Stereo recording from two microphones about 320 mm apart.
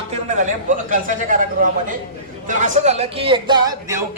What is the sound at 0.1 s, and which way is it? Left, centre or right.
A man's voice, right.